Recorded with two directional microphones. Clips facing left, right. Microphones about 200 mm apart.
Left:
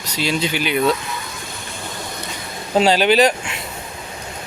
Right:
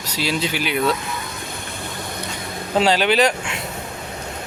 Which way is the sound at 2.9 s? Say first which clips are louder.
Left 3 dB; 35° left (ahead or behind).